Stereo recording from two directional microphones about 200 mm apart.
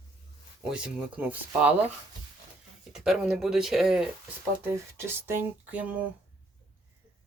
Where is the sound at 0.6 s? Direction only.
5° right (ahead or behind).